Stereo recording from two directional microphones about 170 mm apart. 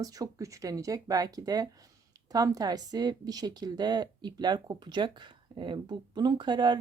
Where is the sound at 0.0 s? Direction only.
20° right (ahead or behind).